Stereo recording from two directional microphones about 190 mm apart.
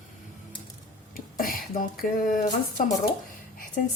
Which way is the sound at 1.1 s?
50° left (ahead or behind).